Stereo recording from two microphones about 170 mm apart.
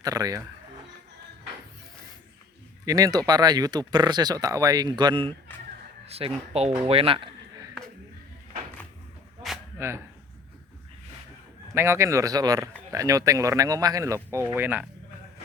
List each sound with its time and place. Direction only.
0.0 s speech: 20° right (ahead or behind)
2.8 s speech: 20° right (ahead or behind)
9.7 s speech: 15° right (ahead or behind)
11.7 s speech: 15° right (ahead or behind)